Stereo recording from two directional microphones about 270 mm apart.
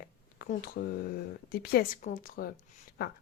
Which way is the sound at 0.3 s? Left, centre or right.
Left.